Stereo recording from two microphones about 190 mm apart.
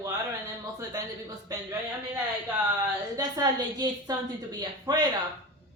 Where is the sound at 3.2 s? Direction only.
20° right (ahead or behind).